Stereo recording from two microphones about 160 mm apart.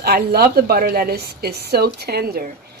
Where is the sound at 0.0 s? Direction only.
80° right.